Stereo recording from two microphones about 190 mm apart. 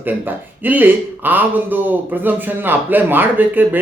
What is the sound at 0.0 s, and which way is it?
Speech, 10° right (ahead or behind).